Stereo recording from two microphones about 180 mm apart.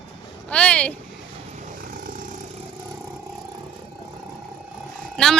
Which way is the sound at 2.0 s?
50° right (ahead or behind).